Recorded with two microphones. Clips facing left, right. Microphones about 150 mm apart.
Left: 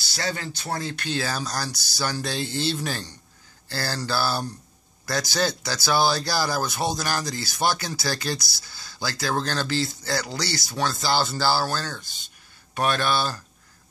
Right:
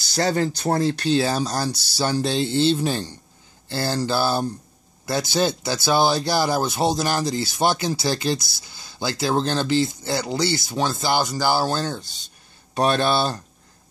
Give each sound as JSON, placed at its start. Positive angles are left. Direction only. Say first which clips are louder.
{"t": 0.1, "sound": "speech", "louder": "right 9 dB", "side_deg": -40}